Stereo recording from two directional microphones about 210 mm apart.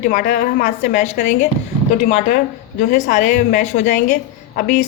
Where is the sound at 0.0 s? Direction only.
40° left (ahead or behind).